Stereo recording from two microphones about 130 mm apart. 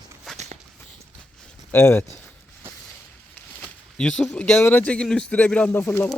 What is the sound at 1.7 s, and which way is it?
Speech, 20° left (ahead or behind).